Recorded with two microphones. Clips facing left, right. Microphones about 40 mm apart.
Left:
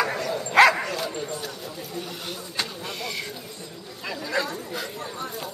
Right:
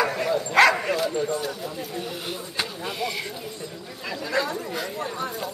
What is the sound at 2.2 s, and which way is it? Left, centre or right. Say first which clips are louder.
Speech: right 1 dB; centre.